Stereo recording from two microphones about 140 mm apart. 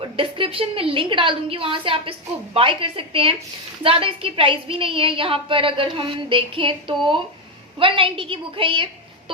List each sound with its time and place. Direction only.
0.2 s a woman's voice: 40° right (ahead or behind)